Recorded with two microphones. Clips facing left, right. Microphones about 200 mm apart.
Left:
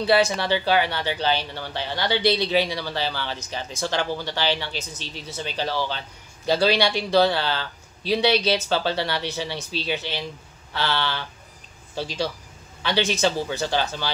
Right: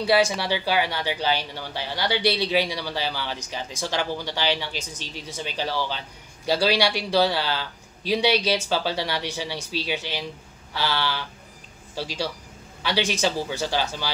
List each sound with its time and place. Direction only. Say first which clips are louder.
0.0 s speech: left 1 dB; 10° right (ahead or behind)